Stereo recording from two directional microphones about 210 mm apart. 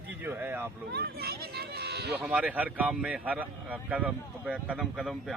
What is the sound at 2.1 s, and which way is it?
A man's voice, 5° right (ahead or behind).